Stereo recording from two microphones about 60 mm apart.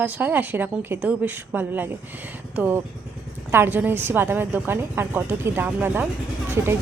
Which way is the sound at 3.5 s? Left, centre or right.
Right.